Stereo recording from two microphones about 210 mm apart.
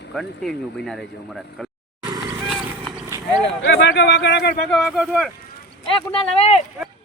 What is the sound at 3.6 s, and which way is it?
Speech, 60° left (ahead or behind).